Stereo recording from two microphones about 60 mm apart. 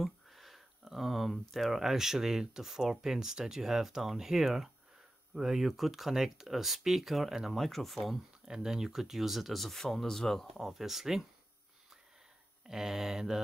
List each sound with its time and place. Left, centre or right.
0.0 s speech: centre
12.6 s speech: centre